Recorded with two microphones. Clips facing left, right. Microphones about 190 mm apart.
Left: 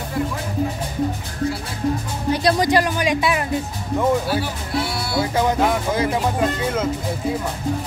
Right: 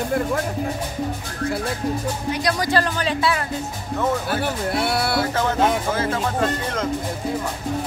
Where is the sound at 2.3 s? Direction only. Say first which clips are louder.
Left 7 dB; 30° left (ahead or behind).